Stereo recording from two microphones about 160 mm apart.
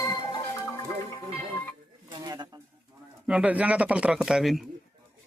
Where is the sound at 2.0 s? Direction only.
25° right (ahead or behind).